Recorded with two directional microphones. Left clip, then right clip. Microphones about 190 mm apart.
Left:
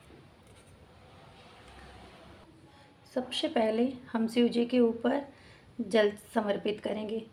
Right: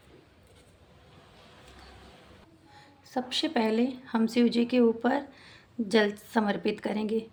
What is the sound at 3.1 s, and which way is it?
Speech, 45° right (ahead or behind).